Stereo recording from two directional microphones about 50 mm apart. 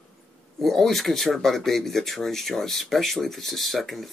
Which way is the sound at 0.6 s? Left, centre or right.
Centre.